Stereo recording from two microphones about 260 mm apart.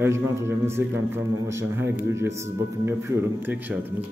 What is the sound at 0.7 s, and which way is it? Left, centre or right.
Speech, centre.